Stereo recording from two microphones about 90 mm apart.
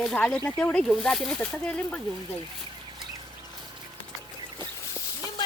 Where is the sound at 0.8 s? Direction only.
5° left (ahead or behind).